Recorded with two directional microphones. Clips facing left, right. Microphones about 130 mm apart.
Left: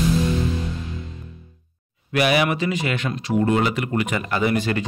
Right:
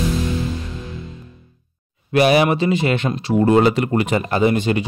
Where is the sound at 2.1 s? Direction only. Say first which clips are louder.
Right 5 dB; 30° right (ahead or behind).